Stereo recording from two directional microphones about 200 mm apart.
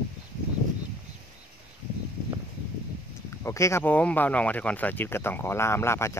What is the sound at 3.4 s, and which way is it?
Speech, 15° left (ahead or behind).